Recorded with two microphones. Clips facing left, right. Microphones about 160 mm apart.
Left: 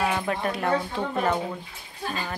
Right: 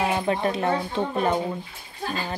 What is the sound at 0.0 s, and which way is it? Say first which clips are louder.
A woman's voice: right 3 dB; 25° right (ahead or behind).